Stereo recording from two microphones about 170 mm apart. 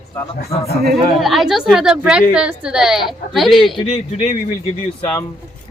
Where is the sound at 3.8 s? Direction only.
40° left (ahead or behind).